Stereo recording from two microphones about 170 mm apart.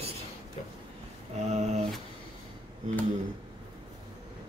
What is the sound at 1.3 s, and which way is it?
Speech, 40° right (ahead or behind).